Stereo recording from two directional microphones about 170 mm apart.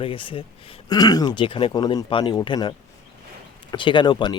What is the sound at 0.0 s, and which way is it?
Speech, 30° left (ahead or behind).